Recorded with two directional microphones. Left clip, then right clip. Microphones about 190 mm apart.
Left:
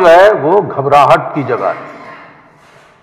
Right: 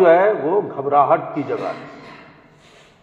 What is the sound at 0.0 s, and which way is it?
A man's voice, 30° left (ahead or behind).